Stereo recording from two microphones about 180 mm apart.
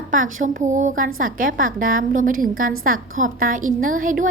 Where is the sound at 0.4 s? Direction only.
45° right (ahead or behind).